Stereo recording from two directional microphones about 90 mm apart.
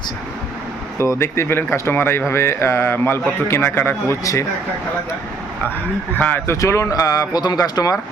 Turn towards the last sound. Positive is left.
turn(degrees=45)  # may be behind; listen again after turning